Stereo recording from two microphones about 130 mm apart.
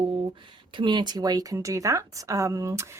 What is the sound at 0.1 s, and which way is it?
Speech, 40° right (ahead or behind).